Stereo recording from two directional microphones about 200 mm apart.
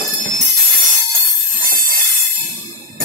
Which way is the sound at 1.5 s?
45° right (ahead or behind).